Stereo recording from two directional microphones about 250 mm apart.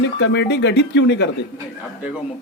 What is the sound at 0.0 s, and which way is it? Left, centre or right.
Speech, left.